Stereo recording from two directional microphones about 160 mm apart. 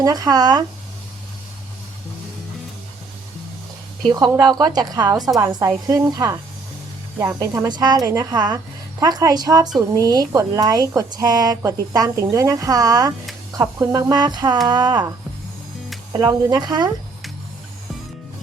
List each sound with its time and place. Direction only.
0.0 s speech: 25° right (ahead or behind)
4.0 s speech: 25° right (ahead or behind)
16.1 s speech: 25° right (ahead or behind)